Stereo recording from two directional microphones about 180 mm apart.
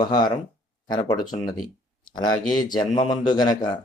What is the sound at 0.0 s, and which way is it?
Speech, 25° left (ahead or behind).